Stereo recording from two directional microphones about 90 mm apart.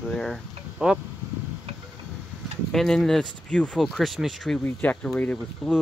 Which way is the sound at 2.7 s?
5° left (ahead or behind).